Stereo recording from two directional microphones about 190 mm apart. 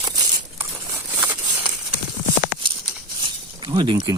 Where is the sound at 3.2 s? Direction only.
25° right (ahead or behind).